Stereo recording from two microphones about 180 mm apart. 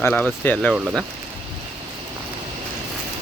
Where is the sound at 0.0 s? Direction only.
10° left (ahead or behind).